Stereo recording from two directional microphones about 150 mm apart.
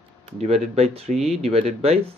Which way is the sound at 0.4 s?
45° right (ahead or behind).